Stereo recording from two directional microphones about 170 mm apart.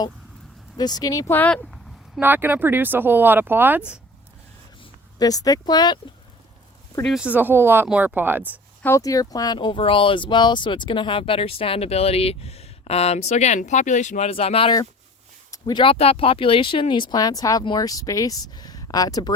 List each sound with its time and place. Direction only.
0.8 s speech: 25° left (ahead or behind)
2.1 s speech: 10° right (ahead or behind)
4.8 s speech: 20° left (ahead or behind)
7.0 s speech: 5° right (ahead or behind)
8.8 s speech: 15° left (ahead or behind)